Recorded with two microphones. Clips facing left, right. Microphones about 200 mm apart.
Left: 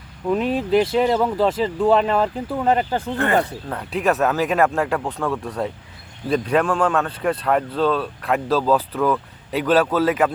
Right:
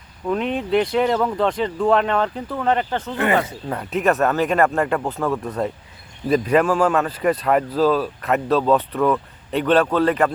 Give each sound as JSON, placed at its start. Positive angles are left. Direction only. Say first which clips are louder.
{"t": 0.3, "sound": "speech", "louder": "left 2 dB", "side_deg": 5}
{"t": 3.2, "sound": "speech", "louder": "even", "side_deg": -20}
{"t": 3.7, "sound": "speech", "louder": "right 5 dB", "side_deg": -5}